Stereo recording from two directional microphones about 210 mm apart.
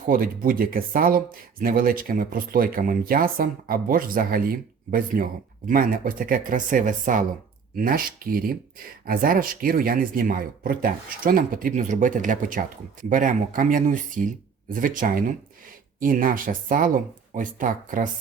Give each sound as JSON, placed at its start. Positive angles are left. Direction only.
{"t": 0.1, "sound": "speech", "side_deg": -45}